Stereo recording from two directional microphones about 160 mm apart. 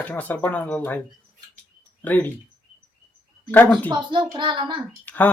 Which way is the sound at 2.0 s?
10° left (ahead or behind).